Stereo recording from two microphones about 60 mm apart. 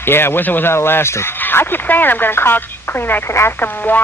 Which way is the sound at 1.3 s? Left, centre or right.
Left.